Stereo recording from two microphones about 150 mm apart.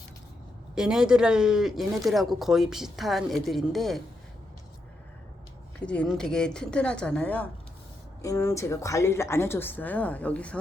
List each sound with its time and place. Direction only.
0.8 s speech: 5° right (ahead or behind)
5.8 s a woman's voice: 5° left (ahead or behind)
8.2 s a woman's voice: 20° left (ahead or behind)